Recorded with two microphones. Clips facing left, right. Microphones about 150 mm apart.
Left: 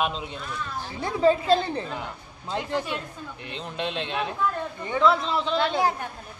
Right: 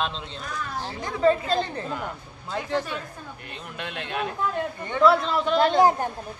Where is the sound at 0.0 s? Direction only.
10° left (ahead or behind).